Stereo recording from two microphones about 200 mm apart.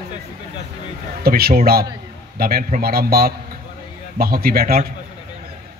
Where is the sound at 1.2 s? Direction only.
50° right (ahead or behind).